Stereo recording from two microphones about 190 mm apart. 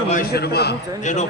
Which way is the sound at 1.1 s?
40° left (ahead or behind).